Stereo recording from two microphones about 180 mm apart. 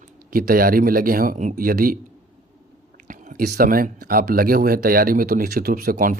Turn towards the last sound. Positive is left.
turn(degrees=-50)  # may be behind; listen again after turning